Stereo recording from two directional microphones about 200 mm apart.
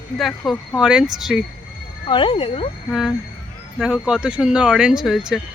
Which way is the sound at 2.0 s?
25° left (ahead or behind).